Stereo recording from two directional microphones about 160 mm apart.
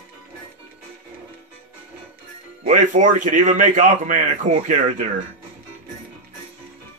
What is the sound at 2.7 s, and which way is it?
A man's voice, 50° right (ahead or behind).